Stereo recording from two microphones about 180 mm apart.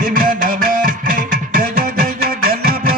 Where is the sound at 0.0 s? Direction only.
50° right (ahead or behind).